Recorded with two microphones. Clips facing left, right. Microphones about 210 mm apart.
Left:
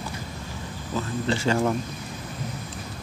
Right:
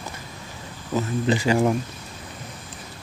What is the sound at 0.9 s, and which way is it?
Speech, 15° right (ahead or behind).